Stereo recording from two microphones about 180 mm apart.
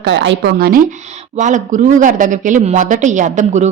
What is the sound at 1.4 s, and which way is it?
A woman's voice, 45° right (ahead or behind).